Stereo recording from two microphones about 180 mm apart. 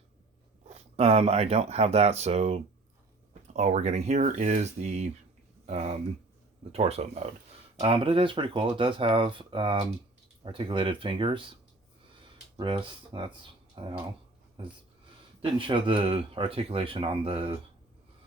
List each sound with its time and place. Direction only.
0.7 s speech: 35° right (ahead or behind)
12.5 s speech: 25° right (ahead or behind)
15.4 s speech: 30° right (ahead or behind)